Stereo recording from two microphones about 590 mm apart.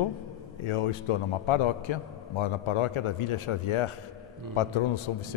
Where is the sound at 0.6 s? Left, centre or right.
Left.